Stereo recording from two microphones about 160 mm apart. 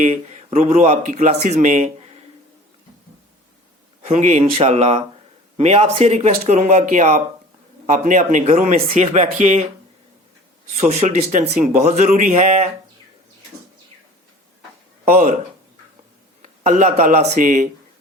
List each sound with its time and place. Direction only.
0.0 s speech: 45° right (ahead or behind)
4.0 s speech: 45° right (ahead or behind)
10.8 s speech: 40° right (ahead or behind)
15.0 s speech: 45° right (ahead or behind)
16.4 s speech: 50° right (ahead or behind)